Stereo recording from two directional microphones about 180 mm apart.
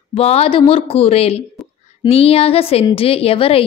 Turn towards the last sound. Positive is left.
turn(degrees=30)  # may be behind; listen again after turning